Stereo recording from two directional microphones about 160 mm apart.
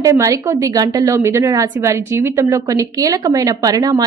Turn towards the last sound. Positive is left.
turn(degrees=-25)  # may be behind; listen again after turning